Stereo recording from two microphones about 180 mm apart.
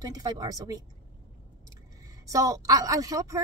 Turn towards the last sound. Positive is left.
turn(degrees=-20)  # may be behind; listen again after turning